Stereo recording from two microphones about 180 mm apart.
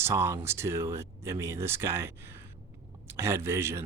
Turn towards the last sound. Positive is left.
turn(degrees=-15)  # may be behind; listen again after turning